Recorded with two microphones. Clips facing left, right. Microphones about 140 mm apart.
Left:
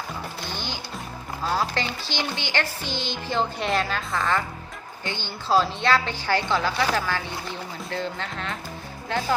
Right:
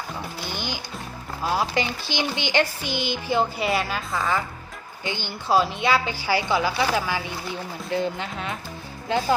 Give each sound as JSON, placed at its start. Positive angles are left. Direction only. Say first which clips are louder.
{"t": 0.4, "sound": "music", "louder": "right 4 dB", "side_deg": -15}
{"t": 1.5, "sound": "speech", "louder": "right 2 dB", "side_deg": -15}
{"t": 5.0, "sound": "speech", "louder": "right 2 dB", "side_deg": -15}